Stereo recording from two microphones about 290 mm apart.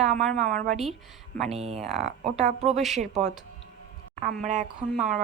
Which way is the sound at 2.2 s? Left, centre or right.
Right.